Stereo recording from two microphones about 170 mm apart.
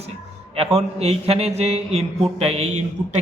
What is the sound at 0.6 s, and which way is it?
A man's voice, 35° right (ahead or behind).